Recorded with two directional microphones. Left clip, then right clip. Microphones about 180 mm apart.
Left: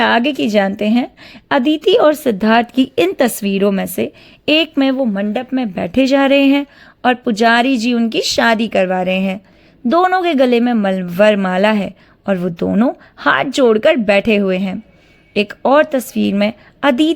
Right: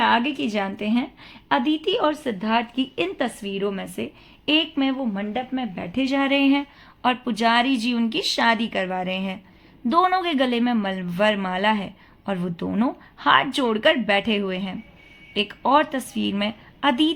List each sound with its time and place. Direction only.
0.0 s a woman's voice: 50° left (ahead or behind)